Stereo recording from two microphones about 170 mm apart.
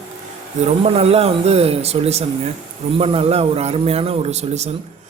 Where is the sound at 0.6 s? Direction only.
35° right (ahead or behind).